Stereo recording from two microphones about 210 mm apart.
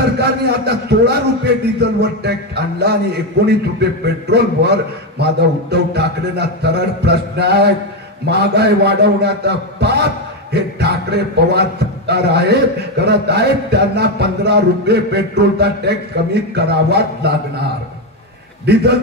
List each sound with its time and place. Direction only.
0.2 s a man's voice: 50° right (ahead or behind)
18.7 s a man's voice: 50° right (ahead or behind)